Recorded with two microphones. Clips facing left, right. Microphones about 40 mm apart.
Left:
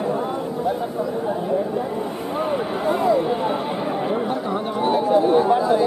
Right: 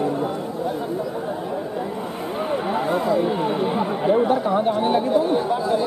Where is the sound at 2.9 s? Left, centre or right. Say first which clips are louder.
Left 3 dB; centre.